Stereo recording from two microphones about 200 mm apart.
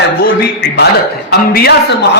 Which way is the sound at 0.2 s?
55° left (ahead or behind).